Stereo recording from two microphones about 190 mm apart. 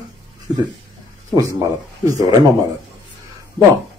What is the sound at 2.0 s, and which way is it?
Speech, 20° right (ahead or behind).